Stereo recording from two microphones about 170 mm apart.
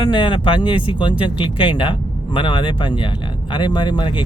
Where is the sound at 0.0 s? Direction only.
30° left (ahead or behind).